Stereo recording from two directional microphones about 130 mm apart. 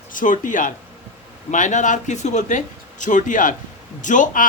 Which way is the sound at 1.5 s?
70° left (ahead or behind).